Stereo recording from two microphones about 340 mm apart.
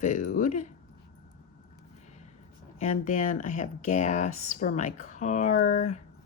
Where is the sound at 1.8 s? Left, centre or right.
Centre.